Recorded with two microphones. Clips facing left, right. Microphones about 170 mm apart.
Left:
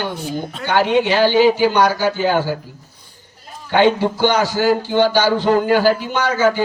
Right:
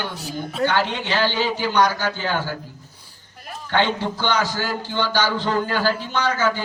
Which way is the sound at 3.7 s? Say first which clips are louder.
Left 7 dB; 10° left (ahead or behind).